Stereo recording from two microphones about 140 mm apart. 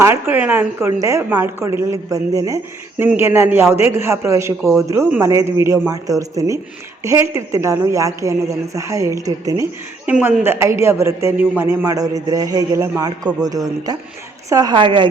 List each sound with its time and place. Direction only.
0.0 s a woman's voice: 15° right (ahead or behind)
10.1 s a man's voice: 10° right (ahead or behind); by 15.1 s 35° right (ahead or behind)